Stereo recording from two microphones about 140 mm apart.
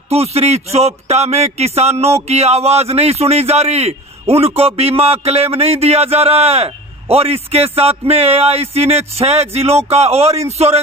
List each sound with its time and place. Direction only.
0.1 s a man's voice: 45° right (ahead or behind)